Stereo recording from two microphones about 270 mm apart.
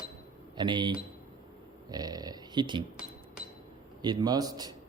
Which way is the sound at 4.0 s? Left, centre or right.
Centre.